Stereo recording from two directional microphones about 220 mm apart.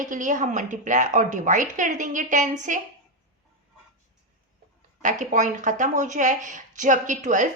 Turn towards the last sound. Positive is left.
turn(degrees=-35)  # may be behind; listen again after turning